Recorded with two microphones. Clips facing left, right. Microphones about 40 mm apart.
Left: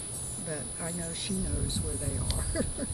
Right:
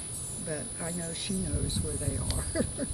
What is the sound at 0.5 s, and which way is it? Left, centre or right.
Speech, centre.